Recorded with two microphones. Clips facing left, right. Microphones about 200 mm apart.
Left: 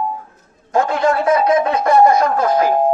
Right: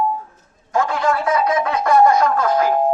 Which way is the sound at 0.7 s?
25° left (ahead or behind).